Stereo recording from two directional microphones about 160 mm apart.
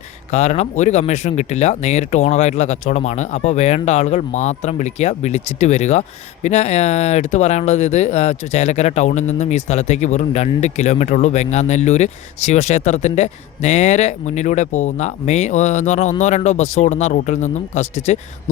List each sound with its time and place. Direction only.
0.3 s speech: 45° left (ahead or behind)